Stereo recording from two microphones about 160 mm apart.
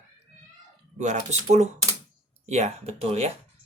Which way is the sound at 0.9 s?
45° right (ahead or behind).